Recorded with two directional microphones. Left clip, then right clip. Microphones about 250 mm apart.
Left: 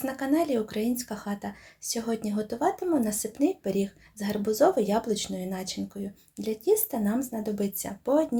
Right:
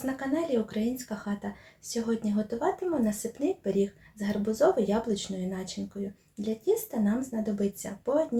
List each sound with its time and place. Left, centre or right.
0.0 s speech: left